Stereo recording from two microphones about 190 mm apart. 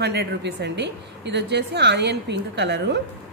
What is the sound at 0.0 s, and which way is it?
A woman's voice, 60° right (ahead or behind).